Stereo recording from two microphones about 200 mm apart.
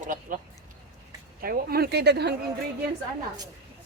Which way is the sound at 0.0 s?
40° right (ahead or behind).